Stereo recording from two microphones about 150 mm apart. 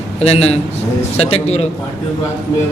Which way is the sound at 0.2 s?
45° left (ahead or behind).